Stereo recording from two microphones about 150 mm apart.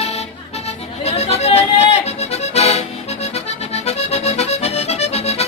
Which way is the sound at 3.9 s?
45° left (ahead or behind).